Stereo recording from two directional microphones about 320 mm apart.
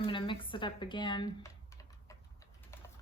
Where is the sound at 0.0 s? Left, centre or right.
Centre.